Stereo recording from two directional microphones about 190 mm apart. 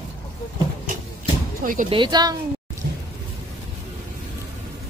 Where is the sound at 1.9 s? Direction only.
25° right (ahead or behind).